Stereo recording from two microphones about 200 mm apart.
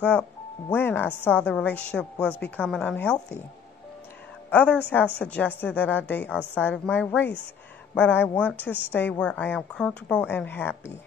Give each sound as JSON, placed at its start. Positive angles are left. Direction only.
{"t": 0.7, "sound": "a woman's voice", "side_deg": 10}
{"t": 4.5, "sound": "speech", "side_deg": 5}